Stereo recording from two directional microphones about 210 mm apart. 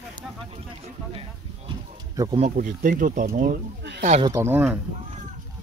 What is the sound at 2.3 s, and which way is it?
Speech, 35° right (ahead or behind).